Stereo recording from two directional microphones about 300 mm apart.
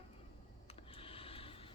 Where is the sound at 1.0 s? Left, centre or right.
Centre.